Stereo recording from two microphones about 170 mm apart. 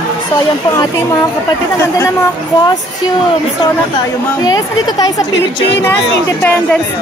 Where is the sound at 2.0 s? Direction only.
15° left (ahead or behind).